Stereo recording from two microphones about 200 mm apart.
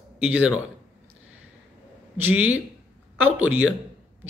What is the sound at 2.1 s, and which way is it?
Speech, 10° right (ahead or behind).